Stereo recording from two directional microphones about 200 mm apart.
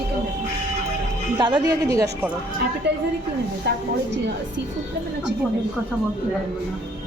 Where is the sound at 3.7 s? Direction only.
60° right (ahead or behind).